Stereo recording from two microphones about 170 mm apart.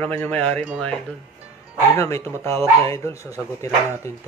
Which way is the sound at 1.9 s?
15° left (ahead or behind).